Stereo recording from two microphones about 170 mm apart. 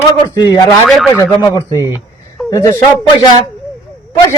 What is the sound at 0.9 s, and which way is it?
Speech, centre (ahead or behind).